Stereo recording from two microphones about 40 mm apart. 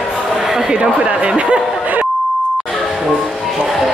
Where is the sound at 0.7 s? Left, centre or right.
Right.